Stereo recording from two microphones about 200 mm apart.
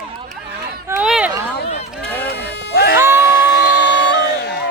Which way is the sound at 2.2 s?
55° left (ahead or behind).